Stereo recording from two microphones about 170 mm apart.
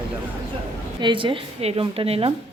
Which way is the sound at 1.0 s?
30° right (ahead or behind).